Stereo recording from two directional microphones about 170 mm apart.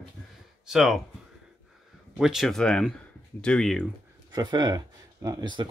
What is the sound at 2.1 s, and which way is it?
Speech, 5° right (ahead or behind).